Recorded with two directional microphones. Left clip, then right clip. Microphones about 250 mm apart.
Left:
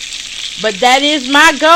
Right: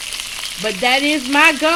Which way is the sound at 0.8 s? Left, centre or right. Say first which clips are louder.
Left 6 dB; centre.